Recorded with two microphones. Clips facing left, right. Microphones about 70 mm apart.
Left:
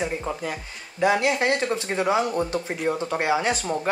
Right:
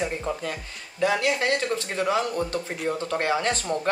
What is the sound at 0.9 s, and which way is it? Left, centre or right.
Speech, left.